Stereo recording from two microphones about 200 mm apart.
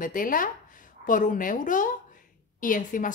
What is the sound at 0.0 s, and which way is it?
A woman's voice, 45° left (ahead or behind).